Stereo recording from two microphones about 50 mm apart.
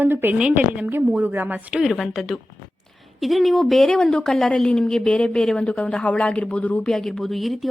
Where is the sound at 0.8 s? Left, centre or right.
Right.